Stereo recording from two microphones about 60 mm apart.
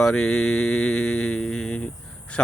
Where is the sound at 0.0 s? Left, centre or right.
Centre.